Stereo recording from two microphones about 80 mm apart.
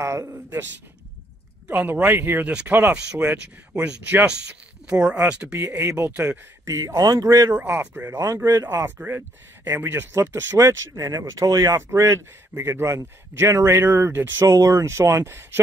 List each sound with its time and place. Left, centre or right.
0.0 s a man's voice: right
1.7 s speech: right
5.6 s speech: right
6.7 s a man's voice: right
7.0 s speech: right
7.2 s a man's voice: right
7.5 s speech: right
10.3 s a man's voice: right
11.1 s speech: right
11.7 s a man's voice: right
14.4 s a man's voice: right